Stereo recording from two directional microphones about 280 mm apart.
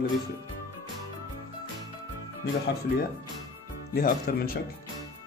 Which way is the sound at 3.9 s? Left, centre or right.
Left.